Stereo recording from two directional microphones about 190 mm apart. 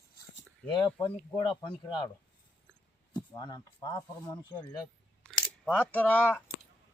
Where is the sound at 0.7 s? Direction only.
20° left (ahead or behind).